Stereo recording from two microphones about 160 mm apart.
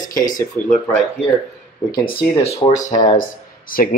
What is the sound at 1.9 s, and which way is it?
Speech, 25° left (ahead or behind).